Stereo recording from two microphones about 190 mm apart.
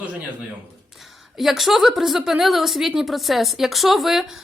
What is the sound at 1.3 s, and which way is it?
A woman's voice, centre (ahead or behind).